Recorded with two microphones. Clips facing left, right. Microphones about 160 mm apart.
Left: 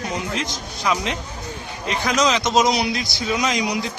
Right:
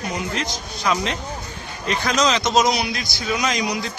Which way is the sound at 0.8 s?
15° left (ahead or behind).